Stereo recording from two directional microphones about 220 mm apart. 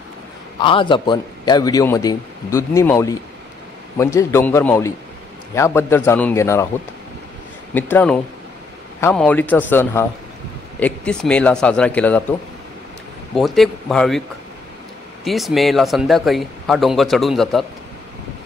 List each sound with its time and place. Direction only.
0.6 s a man's voice: 25° left (ahead or behind)
7.7 s a man's voice: 5° left (ahead or behind)
13.3 s a man's voice: centre (ahead or behind)
15.2 s a man's voice: centre (ahead or behind)